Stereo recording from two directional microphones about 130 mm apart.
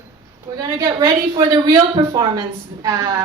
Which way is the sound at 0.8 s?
30° right (ahead or behind).